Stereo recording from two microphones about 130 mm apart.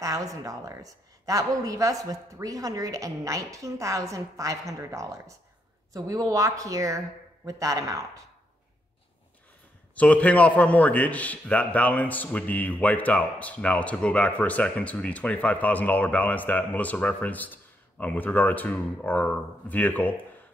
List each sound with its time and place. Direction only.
0.0 s a woman's voice: 25° right (ahead or behind)
9.9 s a man's voice: 10° left (ahead or behind)